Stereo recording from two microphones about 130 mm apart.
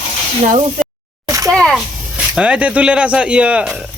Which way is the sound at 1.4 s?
5° left (ahead or behind).